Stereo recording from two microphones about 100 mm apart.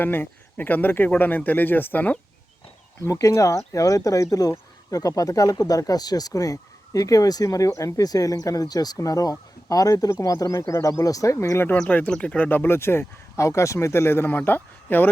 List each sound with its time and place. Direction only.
0.0 s speech: 20° left (ahead or behind)
3.1 s speech: 35° left (ahead or behind); by 15.1 s 20° left (ahead or behind)